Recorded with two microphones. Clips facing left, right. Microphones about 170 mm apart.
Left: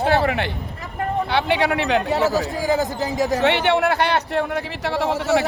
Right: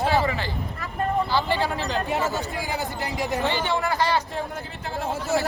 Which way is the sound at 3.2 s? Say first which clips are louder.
Left 7 dB; 75° left (ahead or behind).